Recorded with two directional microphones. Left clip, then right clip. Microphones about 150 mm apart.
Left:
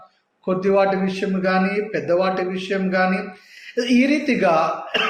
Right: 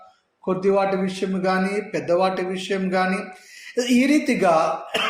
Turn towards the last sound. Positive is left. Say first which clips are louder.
# left 1 dB
turn(degrees=-40)  # may be behind; listen again after turning